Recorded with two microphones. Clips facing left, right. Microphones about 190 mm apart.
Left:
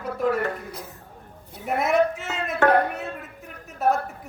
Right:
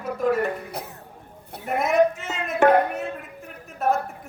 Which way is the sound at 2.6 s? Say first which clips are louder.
Right 2 dB; 15° right (ahead or behind).